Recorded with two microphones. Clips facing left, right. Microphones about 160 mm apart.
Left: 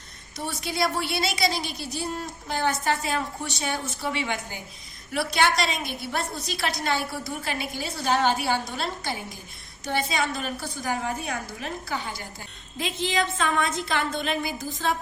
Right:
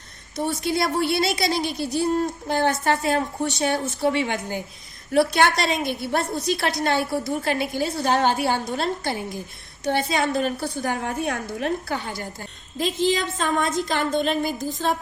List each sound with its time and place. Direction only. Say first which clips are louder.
0.3 s a woman's voice: right 5 dB; 55° right (ahead or behind)